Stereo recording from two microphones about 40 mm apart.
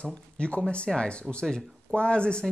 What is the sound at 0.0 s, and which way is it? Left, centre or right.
Speech, left.